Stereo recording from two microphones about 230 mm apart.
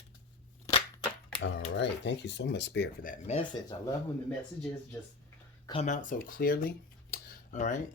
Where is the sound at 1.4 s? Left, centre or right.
Left.